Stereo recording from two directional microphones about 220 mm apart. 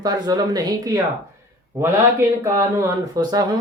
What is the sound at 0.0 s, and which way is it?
Speech, 20° right (ahead or behind).